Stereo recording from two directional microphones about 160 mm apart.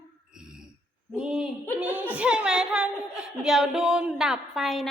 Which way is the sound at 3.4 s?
Centre (ahead or behind).